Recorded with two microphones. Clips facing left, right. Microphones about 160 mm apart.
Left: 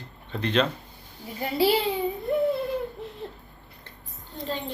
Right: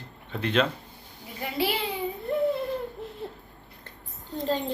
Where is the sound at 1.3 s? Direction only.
30° left (ahead or behind).